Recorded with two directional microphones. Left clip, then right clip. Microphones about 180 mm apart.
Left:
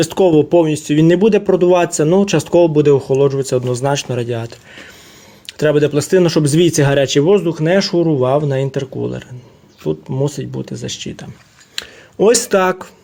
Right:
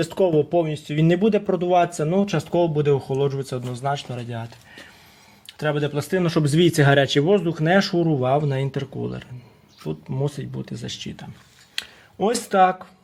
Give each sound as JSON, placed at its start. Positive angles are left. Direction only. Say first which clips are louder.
{"t": 0.0, "sound": "speech", "louder": "left 8 dB", "side_deg": 35}
{"t": 3.4, "sound": "speech", "louder": "left 10 dB", "side_deg": 35}
{"t": 12.2, "sound": "speech", "louder": "left 6 dB", "side_deg": 35}